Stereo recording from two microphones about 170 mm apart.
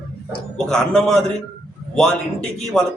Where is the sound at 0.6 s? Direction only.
5° left (ahead or behind).